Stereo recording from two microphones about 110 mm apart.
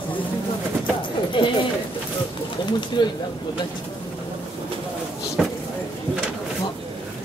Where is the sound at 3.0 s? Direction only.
45° left (ahead or behind).